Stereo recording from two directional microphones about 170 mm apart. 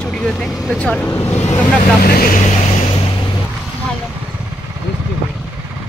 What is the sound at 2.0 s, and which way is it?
Speech, 60° left (ahead or behind).